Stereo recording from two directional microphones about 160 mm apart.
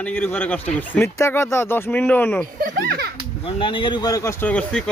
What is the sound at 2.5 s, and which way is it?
Speech, 65° right (ahead or behind).